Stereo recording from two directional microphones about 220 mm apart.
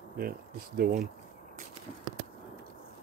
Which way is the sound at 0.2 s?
45° right (ahead or behind).